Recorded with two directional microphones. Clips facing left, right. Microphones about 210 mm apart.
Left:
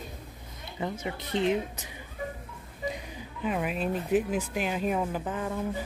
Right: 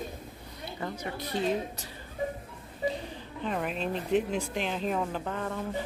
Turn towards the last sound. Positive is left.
turn(degrees=5)  # may be behind; listen again after turning